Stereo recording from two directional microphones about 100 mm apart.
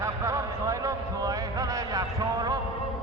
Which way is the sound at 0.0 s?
30° right (ahead or behind).